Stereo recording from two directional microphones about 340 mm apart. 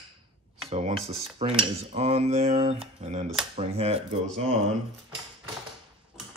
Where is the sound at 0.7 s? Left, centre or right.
Centre.